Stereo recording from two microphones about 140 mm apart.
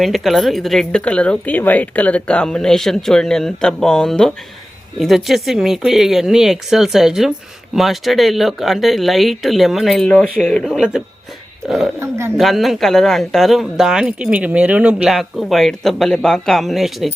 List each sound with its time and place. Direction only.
0.0 s speech: centre (ahead or behind)
11.9 s speech: 20° right (ahead or behind)
12.4 s speech: centre (ahead or behind)